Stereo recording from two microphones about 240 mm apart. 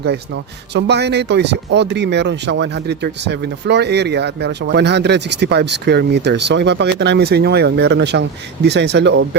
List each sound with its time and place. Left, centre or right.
0.7 s speech: right